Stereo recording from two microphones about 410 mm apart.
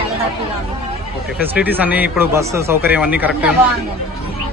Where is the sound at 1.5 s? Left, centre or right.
Centre.